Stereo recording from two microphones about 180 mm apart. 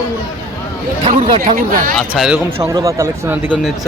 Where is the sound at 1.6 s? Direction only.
50° right (ahead or behind).